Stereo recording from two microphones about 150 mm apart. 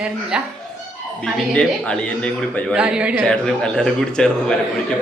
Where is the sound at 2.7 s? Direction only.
5° right (ahead or behind).